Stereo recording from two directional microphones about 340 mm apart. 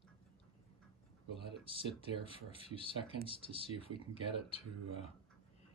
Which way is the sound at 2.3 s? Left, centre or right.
Centre.